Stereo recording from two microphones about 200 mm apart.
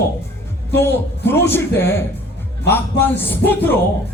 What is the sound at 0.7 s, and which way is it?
A man's voice, 10° left (ahead or behind).